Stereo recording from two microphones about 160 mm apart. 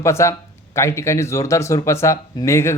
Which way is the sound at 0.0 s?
15° left (ahead or behind).